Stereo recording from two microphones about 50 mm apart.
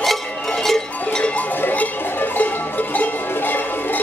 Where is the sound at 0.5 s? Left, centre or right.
Centre.